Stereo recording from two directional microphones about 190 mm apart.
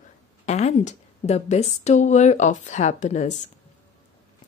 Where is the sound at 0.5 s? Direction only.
35° left (ahead or behind).